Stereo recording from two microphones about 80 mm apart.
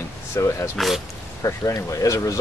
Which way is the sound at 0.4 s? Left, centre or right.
Left.